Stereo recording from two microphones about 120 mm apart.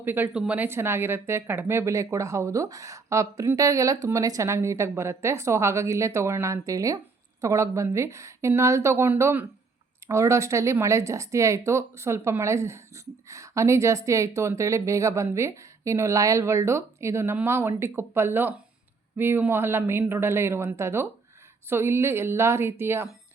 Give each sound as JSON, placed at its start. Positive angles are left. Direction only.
{"t": 0.0, "sound": "speech", "side_deg": -15}